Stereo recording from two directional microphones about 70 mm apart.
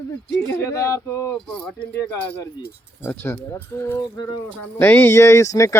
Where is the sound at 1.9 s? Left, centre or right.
Left.